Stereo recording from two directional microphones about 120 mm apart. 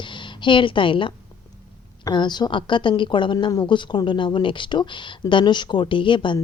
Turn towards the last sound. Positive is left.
turn(degrees=40)  # may be behind; listen again after turning